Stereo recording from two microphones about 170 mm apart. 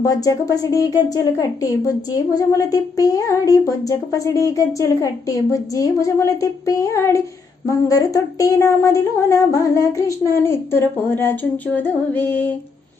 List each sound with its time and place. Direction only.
0.0 s a woman's voice: 20° left (ahead or behind)